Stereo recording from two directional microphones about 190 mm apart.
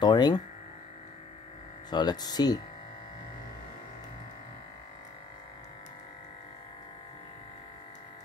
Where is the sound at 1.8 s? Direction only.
20° left (ahead or behind).